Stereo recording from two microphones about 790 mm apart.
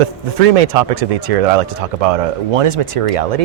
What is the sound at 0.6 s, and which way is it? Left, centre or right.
Speech, right.